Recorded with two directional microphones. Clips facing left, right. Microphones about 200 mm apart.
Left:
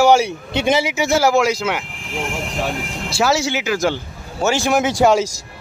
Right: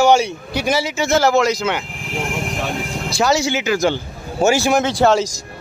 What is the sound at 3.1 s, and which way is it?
Speech, 5° left (ahead or behind).